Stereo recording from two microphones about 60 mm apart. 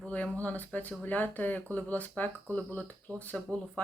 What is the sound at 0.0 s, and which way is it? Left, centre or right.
Speech, left.